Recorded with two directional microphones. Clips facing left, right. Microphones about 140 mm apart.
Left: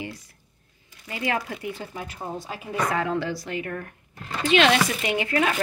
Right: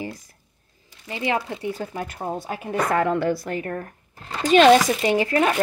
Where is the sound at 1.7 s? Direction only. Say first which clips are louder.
Right 5 dB; 40° right (ahead or behind).